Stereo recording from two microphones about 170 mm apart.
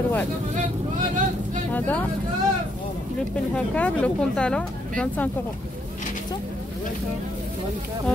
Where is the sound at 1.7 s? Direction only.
10° left (ahead or behind).